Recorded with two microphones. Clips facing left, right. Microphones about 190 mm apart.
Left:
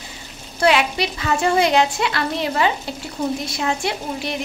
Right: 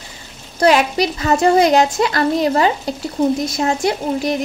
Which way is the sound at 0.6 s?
40° right (ahead or behind).